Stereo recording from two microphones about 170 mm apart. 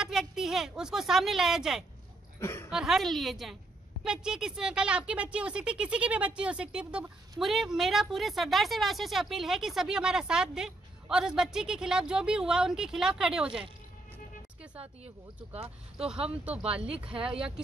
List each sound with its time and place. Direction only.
0.0 s a woman's voice: centre (ahead or behind)
2.4 s speech: 15° left (ahead or behind)
2.7 s speech: 5° right (ahead or behind)
16.0 s speech: 5° right (ahead or behind)